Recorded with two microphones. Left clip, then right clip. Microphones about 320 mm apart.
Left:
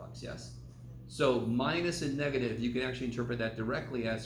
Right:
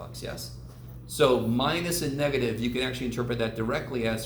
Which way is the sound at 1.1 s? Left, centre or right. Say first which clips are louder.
Right 7 dB; right.